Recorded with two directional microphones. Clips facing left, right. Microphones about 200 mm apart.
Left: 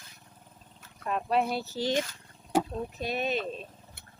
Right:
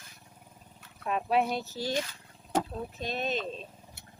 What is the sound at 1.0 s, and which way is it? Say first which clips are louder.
Speech: even; centre (ahead or behind).